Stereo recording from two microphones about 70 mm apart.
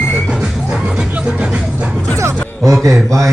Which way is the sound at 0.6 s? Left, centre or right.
Centre.